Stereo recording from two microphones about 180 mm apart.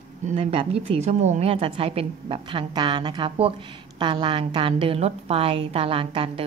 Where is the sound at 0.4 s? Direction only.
30° right (ahead or behind).